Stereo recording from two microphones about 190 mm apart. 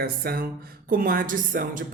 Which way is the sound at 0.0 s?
55° right (ahead or behind).